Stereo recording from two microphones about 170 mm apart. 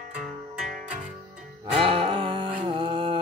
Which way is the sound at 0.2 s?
Centre (ahead or behind).